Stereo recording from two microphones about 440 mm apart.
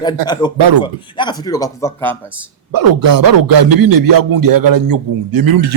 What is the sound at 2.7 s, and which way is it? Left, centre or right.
A man's voice, right.